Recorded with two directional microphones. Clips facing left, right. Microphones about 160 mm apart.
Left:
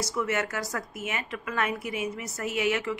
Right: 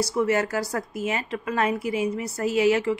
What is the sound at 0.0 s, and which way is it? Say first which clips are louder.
Speech: right 6 dB; 35° right (ahead or behind).